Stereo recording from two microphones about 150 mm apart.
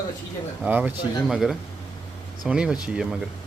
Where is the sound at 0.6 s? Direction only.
10° right (ahead or behind).